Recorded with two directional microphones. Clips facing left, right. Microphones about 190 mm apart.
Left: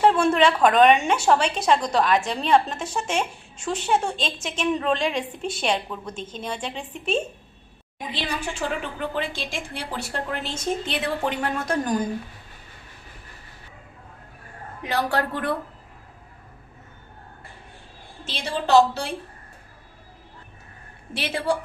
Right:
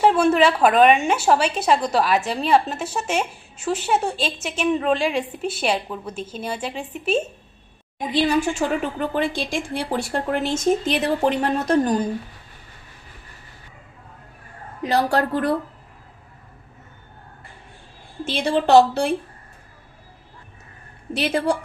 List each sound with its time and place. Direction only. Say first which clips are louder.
0.0 s a woman's voice: right 2 dB; 5° right (ahead or behind)
8.1 s a woman's voice: right 11 dB; 45° right (ahead or behind)
14.8 s a woman's voice: right 5 dB; 35° right (ahead or behind)
18.3 s a woman's voice: right 5 dB; 55° right (ahead or behind)
21.1 s a woman's voice: right 7 dB; 40° right (ahead or behind)